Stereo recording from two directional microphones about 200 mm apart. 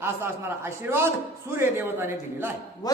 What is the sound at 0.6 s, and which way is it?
A man's voice, 10° right (ahead or behind).